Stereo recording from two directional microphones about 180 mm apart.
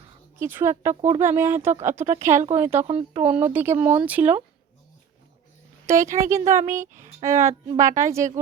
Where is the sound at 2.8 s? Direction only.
35° right (ahead or behind).